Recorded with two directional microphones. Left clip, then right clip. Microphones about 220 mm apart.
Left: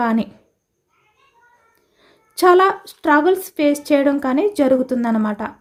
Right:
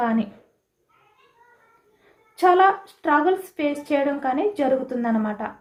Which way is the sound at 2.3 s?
55° left (ahead or behind).